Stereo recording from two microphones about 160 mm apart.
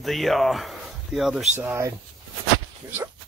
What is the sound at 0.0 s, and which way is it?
Speech, centre (ahead or behind).